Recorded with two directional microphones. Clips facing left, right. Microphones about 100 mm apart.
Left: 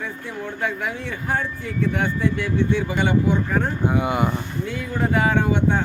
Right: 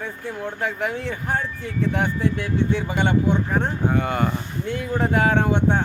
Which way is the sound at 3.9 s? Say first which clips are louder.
Left 1 dB; 10° left (ahead or behind).